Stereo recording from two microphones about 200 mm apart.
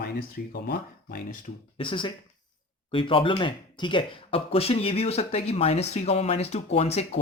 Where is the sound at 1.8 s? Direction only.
25° left (ahead or behind).